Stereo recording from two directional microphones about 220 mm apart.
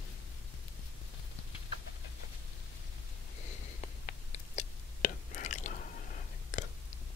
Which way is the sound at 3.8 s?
30° left (ahead or behind).